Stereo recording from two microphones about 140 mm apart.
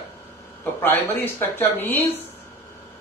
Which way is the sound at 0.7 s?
15° left (ahead or behind).